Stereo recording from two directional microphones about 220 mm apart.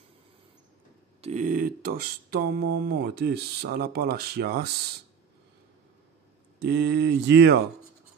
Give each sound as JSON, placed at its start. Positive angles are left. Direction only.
{"t": 1.2, "sound": "speech", "side_deg": -35}
{"t": 6.6, "sound": "speech", "side_deg": -50}